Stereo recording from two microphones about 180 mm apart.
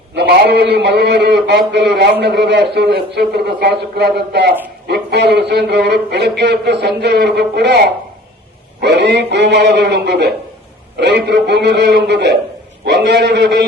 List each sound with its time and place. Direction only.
0.2 s a man's voice: 70° right (ahead or behind)